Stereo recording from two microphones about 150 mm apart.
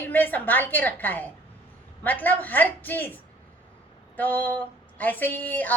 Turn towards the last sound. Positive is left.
turn(degrees=10)  # may be behind; listen again after turning